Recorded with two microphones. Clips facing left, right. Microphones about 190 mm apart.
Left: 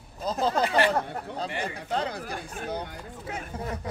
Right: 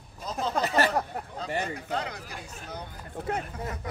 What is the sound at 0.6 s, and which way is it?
Speech, 40° right (ahead or behind).